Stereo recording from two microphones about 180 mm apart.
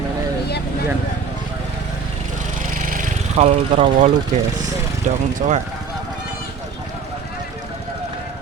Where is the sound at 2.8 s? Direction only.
45° right (ahead or behind).